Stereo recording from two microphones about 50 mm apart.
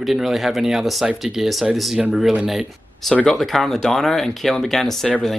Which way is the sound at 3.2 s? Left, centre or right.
Centre.